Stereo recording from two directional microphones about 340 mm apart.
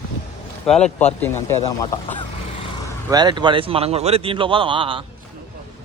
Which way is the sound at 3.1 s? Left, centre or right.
Centre.